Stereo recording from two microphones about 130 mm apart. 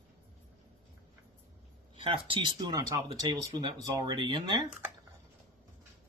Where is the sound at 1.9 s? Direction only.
45° right (ahead or behind).